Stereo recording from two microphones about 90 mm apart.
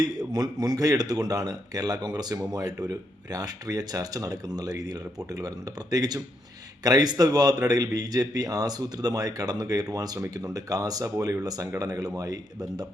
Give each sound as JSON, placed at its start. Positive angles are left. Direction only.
{"t": 0.0, "sound": "speech", "side_deg": -45}